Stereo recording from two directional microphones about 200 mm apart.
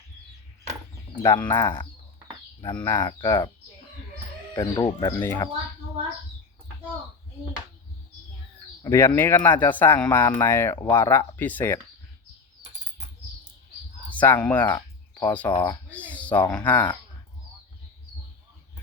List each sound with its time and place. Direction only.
1.2 s speech: 15° left (ahead or behind)
4.5 s speech: 20° left (ahead or behind)
8.8 s speech: 15° left (ahead or behind)
14.1 s speech: 10° left (ahead or behind)
14.8 s bird: 20° left (ahead or behind)
15.6 s a sound: 10° left (ahead or behind)
16.5 s speech: 5° left (ahead or behind)